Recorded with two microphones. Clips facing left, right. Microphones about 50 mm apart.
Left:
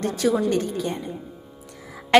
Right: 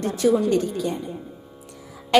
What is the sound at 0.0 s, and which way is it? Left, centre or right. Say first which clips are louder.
Speech: right 2 dB; left.